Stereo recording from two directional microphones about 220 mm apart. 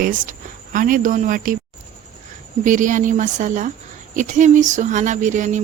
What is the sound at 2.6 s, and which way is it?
Speech, 35° right (ahead or behind).